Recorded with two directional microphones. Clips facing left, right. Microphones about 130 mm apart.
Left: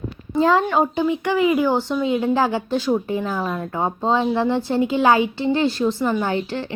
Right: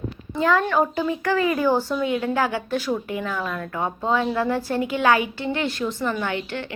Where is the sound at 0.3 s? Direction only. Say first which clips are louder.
Left 3 dB; 25° left (ahead or behind).